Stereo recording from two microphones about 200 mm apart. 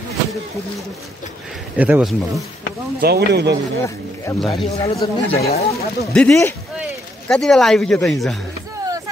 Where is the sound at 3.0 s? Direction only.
55° right (ahead or behind).